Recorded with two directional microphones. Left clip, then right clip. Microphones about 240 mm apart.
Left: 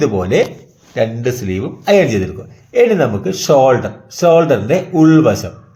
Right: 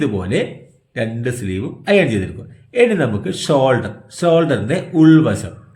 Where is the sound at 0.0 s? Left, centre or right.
Centre.